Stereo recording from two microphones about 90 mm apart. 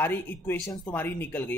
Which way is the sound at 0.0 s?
25° left (ahead or behind).